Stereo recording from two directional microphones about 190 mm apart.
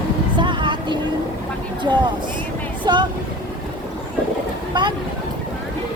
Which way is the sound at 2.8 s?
25° right (ahead or behind).